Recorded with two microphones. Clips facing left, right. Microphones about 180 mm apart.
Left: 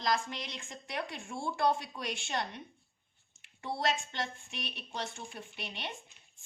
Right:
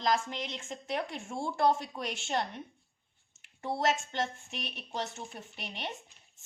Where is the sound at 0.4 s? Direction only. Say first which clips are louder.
Right 6 dB; 25° right (ahead or behind).